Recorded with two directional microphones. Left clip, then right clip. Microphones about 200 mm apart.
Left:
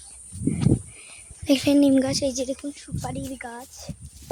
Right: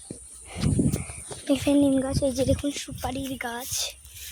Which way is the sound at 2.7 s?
60° right (ahead or behind).